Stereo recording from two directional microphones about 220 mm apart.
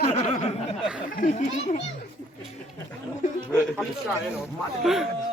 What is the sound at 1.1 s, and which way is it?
Speech, 35° left (ahead or behind).